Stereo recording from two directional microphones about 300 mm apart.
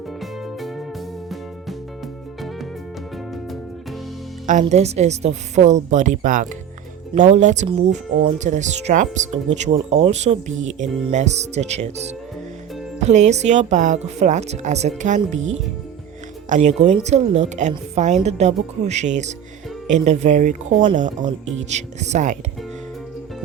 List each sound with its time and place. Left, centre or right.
4.4 s a woman's voice: right
16.5 s a woman's voice: right